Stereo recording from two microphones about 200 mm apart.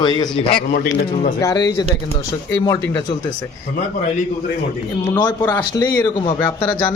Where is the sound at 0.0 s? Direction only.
20° left (ahead or behind).